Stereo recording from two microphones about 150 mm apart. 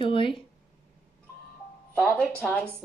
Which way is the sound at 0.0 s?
35° left (ahead or behind).